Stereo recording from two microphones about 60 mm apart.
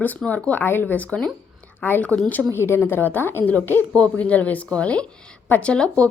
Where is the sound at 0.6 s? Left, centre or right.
Left.